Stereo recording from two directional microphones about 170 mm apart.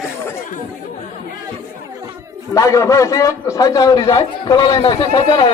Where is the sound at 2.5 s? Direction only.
20° left (ahead or behind).